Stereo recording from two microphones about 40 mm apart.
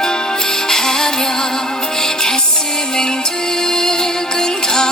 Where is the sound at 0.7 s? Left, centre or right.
Centre.